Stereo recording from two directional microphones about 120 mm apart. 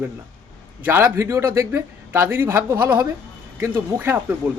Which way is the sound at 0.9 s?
15° right (ahead or behind).